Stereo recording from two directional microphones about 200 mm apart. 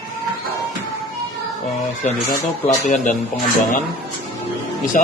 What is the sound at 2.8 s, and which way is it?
Speech, 40° left (ahead or behind).